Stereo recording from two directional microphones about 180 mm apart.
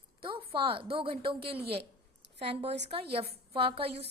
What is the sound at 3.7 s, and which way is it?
Speech, 30° right (ahead or behind).